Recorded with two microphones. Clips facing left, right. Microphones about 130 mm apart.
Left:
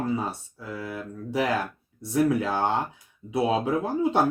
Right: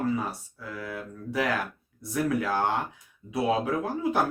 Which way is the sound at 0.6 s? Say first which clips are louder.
Left 2 dB; 25° left (ahead or behind).